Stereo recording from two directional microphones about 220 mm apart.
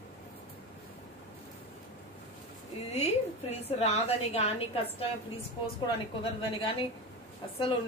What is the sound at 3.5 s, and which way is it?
A woman's voice, 30° left (ahead or behind).